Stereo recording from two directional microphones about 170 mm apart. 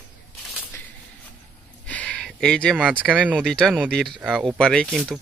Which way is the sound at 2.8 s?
10° right (ahead or behind).